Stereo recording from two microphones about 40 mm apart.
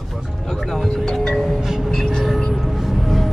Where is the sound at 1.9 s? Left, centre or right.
Centre.